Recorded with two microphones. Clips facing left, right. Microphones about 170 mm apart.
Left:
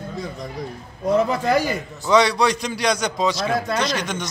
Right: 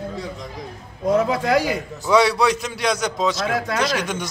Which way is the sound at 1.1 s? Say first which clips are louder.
Even; 5° right (ahead or behind).